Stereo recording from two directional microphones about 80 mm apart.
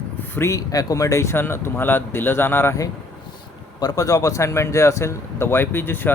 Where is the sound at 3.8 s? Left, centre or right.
Left.